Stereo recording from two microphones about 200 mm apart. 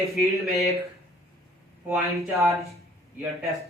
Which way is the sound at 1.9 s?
10° right (ahead or behind).